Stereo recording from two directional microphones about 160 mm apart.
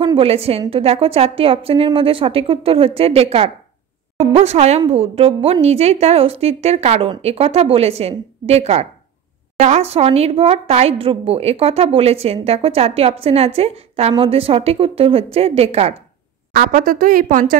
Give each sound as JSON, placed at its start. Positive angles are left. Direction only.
{"t": 0.0, "sound": "speech", "side_deg": -35}
{"t": 16.5, "sound": "speech", "side_deg": -60}